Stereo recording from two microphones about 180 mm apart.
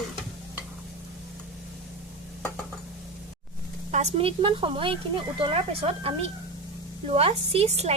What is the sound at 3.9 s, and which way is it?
A woman's voice, 35° right (ahead or behind).